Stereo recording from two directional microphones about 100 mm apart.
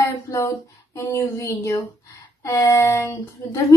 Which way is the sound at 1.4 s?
30° left (ahead or behind).